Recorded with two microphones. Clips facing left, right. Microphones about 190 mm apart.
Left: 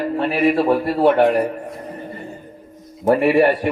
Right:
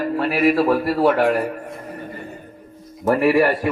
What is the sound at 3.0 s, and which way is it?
Speech, 20° left (ahead or behind).